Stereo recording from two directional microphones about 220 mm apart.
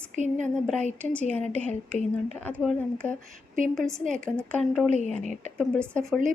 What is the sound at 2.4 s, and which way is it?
Speech, 5° left (ahead or behind).